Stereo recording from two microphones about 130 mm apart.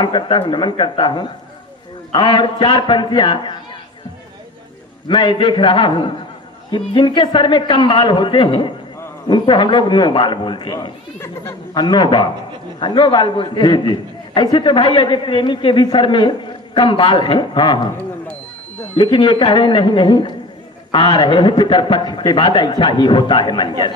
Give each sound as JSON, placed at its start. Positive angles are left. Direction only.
{"t": 0.0, "sound": "a man's voice", "side_deg": 35}
{"t": 5.0, "sound": "a man's voice", "side_deg": 35}
{"t": 18.9, "sound": "a man's voice", "side_deg": 35}